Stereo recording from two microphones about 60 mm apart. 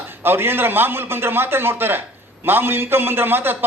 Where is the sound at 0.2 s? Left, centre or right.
Right.